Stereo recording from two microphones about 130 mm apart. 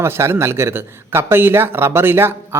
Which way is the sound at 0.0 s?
20° right (ahead or behind).